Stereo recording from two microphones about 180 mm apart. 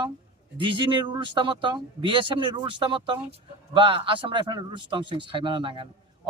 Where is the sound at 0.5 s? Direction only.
30° right (ahead or behind).